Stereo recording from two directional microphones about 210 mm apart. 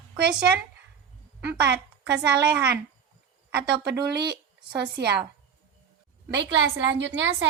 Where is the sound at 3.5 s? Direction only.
50° right (ahead or behind).